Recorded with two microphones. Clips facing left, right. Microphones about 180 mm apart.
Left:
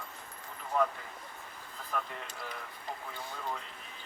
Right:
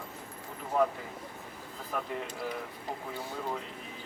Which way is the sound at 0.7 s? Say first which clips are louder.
Right 3 dB; 10° right (ahead or behind).